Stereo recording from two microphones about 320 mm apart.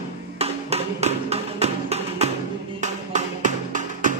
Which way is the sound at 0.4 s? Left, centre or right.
Centre.